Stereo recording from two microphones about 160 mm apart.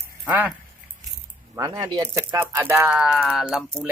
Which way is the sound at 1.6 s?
25° right (ahead or behind).